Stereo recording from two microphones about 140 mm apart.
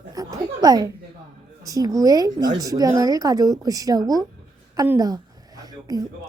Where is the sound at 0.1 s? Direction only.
25° right (ahead or behind).